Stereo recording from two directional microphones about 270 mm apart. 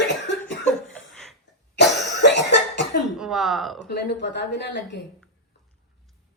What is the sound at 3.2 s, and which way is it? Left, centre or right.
Speech, centre.